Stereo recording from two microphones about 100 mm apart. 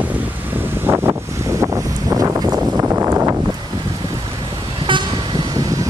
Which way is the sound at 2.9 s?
35° right (ahead or behind).